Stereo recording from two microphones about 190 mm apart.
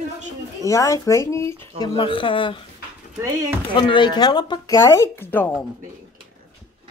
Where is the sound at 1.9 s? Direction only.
25° left (ahead or behind).